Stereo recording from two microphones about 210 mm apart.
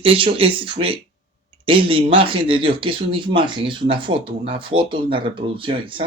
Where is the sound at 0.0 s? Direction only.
25° right (ahead or behind).